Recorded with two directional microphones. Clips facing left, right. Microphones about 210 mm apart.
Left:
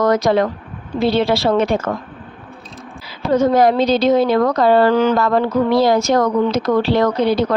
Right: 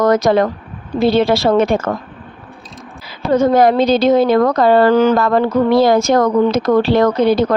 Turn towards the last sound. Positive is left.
turn(degrees=-50)  # may be behind; listen again after turning